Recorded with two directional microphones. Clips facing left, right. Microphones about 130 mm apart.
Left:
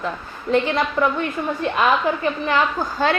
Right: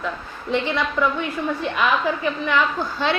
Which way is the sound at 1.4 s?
45° left (ahead or behind).